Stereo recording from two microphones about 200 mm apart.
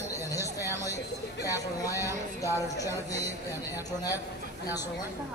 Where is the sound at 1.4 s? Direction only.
15° left (ahead or behind).